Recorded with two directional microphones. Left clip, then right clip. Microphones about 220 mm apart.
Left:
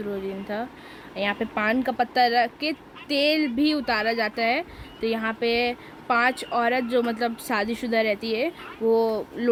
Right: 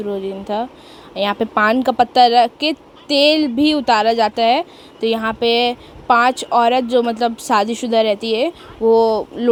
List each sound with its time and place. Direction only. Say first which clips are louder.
0.1 s speech: right 9 dB; 20° right (ahead or behind)